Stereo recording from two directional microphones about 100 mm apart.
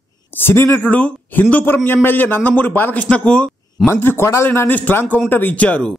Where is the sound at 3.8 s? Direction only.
25° left (ahead or behind).